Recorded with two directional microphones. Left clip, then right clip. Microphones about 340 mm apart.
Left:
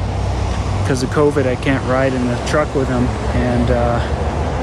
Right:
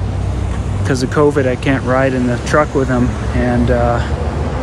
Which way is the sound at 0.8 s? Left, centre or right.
Centre.